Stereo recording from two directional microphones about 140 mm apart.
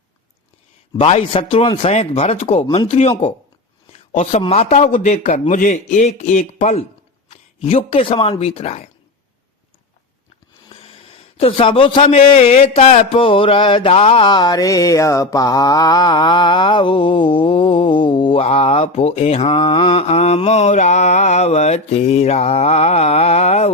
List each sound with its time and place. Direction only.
0.9 s a man's voice: 40° left (ahead or behind)
1.8 s mantra: 50° left (ahead or behind)
2.7 s a man's voice: 45° left (ahead or behind)
4.1 s a man's voice: 50° left (ahead or behind)
10.7 s a man's voice: 45° left (ahead or behind)
18.4 s mantra: 45° left (ahead or behind)